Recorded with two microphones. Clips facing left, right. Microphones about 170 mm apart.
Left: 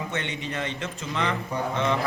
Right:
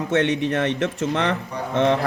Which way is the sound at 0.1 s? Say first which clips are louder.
Right 11 dB; 75° right (ahead or behind).